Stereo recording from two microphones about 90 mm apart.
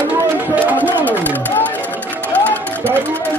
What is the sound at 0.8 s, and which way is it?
Music, 20° right (ahead or behind).